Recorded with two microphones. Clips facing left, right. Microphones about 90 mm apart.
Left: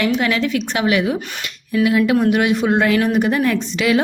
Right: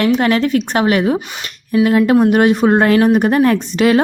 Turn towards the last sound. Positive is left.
turn(degrees=-45)  # may be behind; listen again after turning